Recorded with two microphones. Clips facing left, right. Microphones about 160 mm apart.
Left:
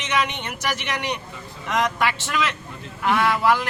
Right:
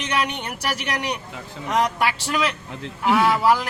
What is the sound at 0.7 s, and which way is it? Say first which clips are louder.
Speech: right 1 dB; 40° right (ahead or behind).